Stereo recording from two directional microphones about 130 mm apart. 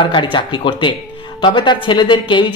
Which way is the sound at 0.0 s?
40° left (ahead or behind).